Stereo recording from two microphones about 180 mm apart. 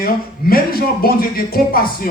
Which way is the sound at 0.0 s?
55° left (ahead or behind).